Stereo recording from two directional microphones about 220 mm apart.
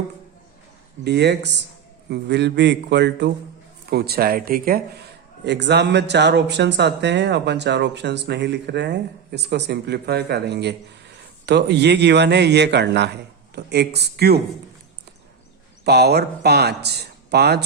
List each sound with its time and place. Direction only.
1.0 s speech: 50° right (ahead or behind)
5.5 s speech: 50° right (ahead or behind)
15.8 s speech: 45° right (ahead or behind)